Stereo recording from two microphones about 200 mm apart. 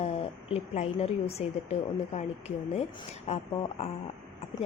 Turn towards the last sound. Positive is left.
turn(degrees=30)  # may be behind; listen again after turning